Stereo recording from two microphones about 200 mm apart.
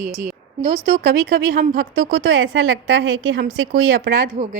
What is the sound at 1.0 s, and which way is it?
Speech, 70° right (ahead or behind).